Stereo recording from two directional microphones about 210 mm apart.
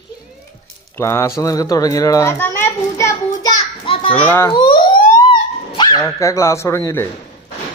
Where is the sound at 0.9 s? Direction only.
10° left (ahead or behind).